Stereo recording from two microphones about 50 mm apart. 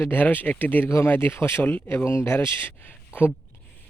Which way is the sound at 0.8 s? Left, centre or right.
Left.